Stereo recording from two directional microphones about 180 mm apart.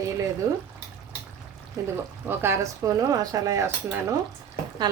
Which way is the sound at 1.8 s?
20° right (ahead or behind).